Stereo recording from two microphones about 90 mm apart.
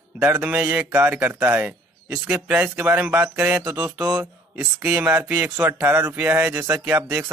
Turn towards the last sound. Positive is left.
turn(degrees=-20)  # may be behind; listen again after turning